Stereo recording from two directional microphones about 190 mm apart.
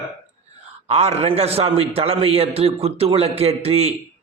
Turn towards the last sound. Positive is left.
turn(degrees=-35)  # may be behind; listen again after turning